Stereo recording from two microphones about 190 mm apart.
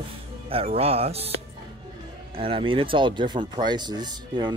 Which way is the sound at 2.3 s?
30° right (ahead or behind).